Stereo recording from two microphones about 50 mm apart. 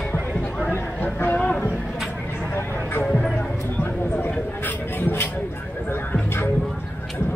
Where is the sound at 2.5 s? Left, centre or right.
Left.